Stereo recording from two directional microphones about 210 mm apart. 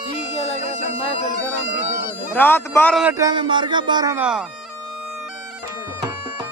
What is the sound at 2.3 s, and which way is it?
Speech, 10° left (ahead or behind).